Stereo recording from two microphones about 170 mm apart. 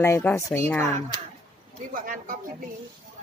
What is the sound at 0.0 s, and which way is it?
Speech, 15° left (ahead or behind).